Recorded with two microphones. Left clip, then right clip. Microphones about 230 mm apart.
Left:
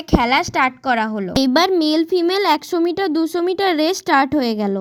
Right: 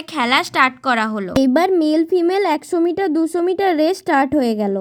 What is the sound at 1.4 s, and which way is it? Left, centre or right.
Speech, left.